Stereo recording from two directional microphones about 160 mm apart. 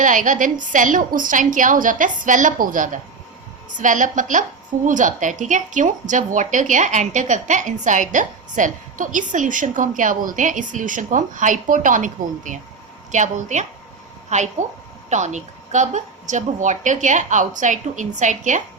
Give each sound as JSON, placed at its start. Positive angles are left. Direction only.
{"t": 0.0, "sound": "a woman's voice", "side_deg": -55}